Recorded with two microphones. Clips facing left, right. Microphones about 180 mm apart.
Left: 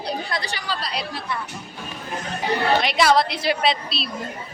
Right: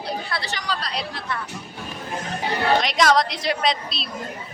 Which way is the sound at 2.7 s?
5° left (ahead or behind).